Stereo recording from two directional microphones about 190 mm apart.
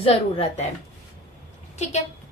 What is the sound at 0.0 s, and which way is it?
Speech, 30° left (ahead or behind).